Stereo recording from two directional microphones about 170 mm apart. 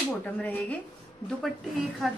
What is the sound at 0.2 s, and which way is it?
Speech, 10° left (ahead or behind).